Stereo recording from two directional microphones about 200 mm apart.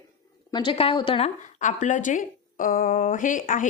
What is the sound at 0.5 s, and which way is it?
A woman's voice, 25° left (ahead or behind).